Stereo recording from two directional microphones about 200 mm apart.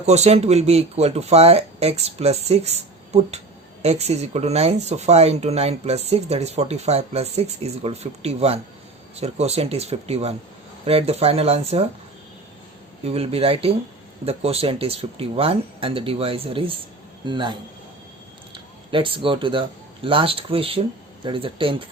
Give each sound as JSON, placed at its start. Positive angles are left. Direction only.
{"t": 0.0, "sound": "speech", "side_deg": -35}
{"t": 13.1, "sound": "speech", "side_deg": -30}